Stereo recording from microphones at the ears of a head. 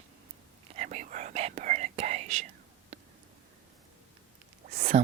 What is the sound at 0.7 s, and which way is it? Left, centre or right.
Whispering, right.